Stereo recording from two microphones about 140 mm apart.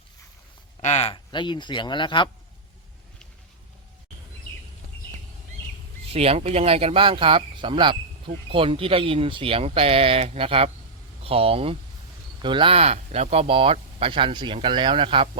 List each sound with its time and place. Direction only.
0.8 s speech: 55° left (ahead or behind)
1.1 s speech: 35° left (ahead or behind)
6.1 s speech: 45° right (ahead or behind)